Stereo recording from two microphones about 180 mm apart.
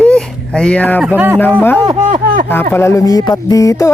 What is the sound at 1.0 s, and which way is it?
Speech, 10° right (ahead or behind).